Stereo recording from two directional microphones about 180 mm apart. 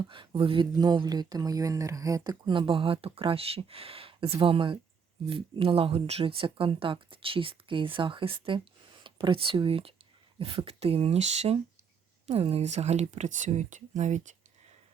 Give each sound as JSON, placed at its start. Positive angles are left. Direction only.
{"t": 0.1, "sound": "speech", "side_deg": -30}